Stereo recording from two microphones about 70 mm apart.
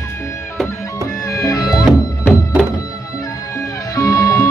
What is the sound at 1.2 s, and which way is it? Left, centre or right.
Music, left.